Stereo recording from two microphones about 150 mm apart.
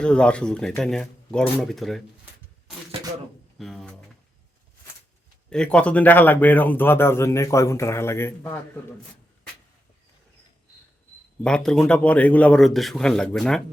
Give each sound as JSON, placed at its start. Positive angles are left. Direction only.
{"t": 0.0, "sound": "speech", "side_deg": 5}
{"t": 3.6, "sound": "a sound", "side_deg": 0}
{"t": 5.5, "sound": "a man's voice", "side_deg": 5}
{"t": 11.4, "sound": "speech", "side_deg": 5}